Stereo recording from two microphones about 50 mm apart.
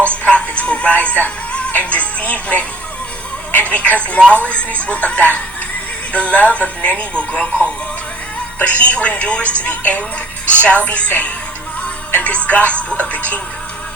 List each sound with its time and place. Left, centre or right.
0.1 s music: left
3.5 s a woman's voice: left
12.1 s speech: left